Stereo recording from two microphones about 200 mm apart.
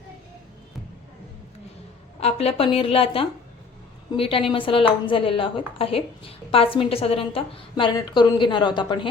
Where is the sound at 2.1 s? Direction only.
30° left (ahead or behind).